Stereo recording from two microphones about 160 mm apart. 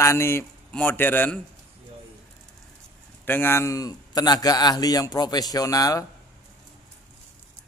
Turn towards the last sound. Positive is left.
turn(degrees=20)  # may be behind; listen again after turning